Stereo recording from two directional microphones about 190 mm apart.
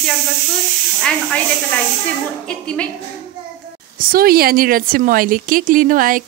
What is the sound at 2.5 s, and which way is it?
Speech, 5° left (ahead or behind).